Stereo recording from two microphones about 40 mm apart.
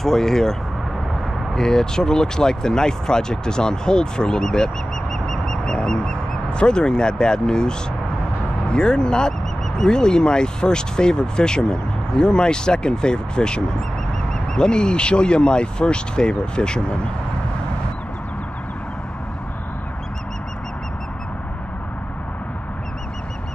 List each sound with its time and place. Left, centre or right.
0.0 s speech: centre